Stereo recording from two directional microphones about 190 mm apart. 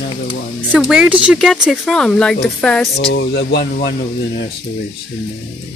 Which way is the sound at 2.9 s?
60° left (ahead or behind).